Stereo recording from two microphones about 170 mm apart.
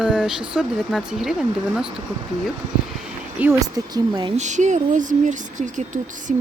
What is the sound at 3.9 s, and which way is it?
Speech, 30° right (ahead or behind).